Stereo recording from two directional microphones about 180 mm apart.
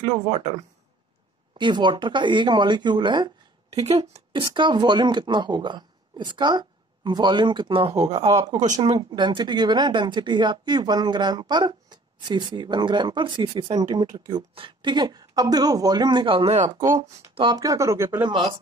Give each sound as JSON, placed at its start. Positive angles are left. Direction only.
{"t": 1.6, "sound": "speech", "side_deg": -25}
{"t": 3.7, "sound": "speech", "side_deg": -35}
{"t": 16.9, "sound": "speech", "side_deg": -25}
{"t": 18.3, "sound": "speech", "side_deg": -25}